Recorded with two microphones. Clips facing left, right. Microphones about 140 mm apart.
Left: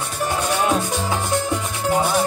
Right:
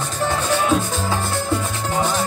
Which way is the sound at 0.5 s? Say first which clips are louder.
Right 1 dB; 15° left (ahead or behind).